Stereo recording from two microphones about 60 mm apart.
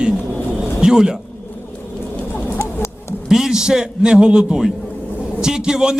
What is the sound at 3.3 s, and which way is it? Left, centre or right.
A man's voice, centre.